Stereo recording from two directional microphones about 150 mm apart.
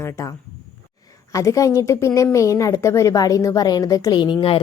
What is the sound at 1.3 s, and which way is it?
A woman's voice, 20° left (ahead or behind).